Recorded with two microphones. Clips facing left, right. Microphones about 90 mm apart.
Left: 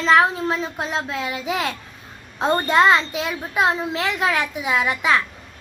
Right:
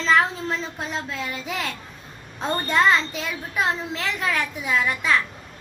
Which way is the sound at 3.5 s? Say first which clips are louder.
Left 5 dB; 65° left (ahead or behind).